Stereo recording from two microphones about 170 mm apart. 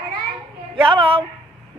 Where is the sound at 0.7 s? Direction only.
30° right (ahead or behind).